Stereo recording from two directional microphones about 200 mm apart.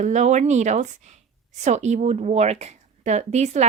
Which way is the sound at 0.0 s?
35° right (ahead or behind).